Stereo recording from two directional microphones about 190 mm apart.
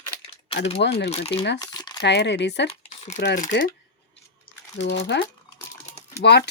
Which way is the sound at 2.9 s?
35° left (ahead or behind).